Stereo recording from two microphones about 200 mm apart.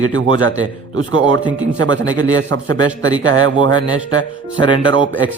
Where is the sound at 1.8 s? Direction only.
20° left (ahead or behind).